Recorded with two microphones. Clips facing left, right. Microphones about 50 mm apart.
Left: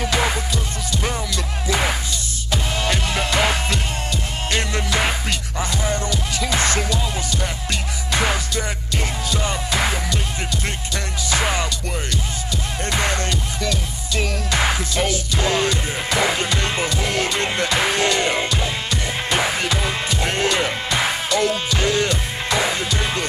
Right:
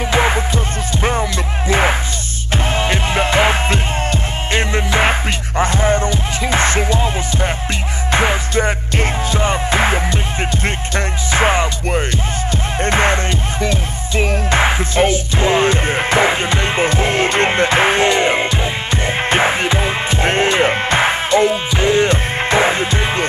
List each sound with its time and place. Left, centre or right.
0.0 s music: right
1.7 s music: right
12.8 s music: right